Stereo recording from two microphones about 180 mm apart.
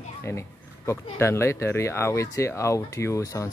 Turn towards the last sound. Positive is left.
turn(degrees=15)  # may be behind; listen again after turning